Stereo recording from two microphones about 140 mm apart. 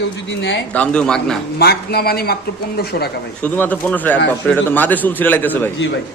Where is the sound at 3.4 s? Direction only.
15° left (ahead or behind).